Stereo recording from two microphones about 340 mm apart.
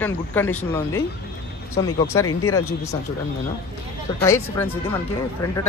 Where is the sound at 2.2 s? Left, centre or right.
Left.